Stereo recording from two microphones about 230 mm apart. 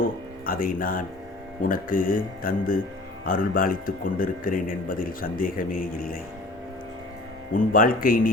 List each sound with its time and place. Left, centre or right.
0.0 s a man's voice: left
7.5 s a man's voice: left